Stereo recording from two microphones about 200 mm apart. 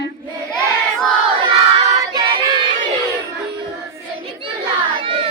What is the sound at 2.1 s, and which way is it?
Child singing, 25° right (ahead or behind).